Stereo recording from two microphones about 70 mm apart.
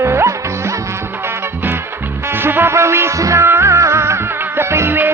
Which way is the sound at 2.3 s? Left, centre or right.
Right.